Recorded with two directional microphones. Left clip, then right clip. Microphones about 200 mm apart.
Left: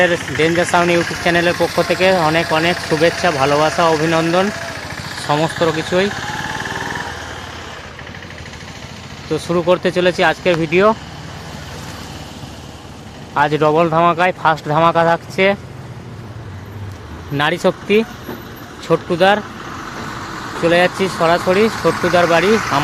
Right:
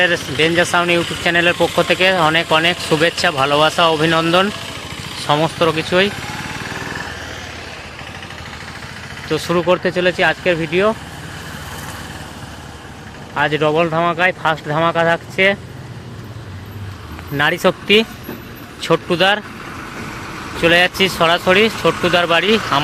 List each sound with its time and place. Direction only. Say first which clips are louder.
0.0 s speech: even; centre (ahead or behind)
6.4 s a sound: left 3 dB; 30° right (ahead or behind)
9.3 s speech: even; 5° left (ahead or behind)
13.3 s speech: left 2 dB; 15° left (ahead or behind)
17.3 s speech: right 1 dB; 5° left (ahead or behind)
20.6 s speech: right 1 dB; centre (ahead or behind)